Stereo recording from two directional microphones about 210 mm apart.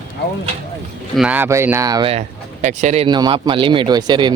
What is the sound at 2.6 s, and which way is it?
Speech, 35° right (ahead or behind).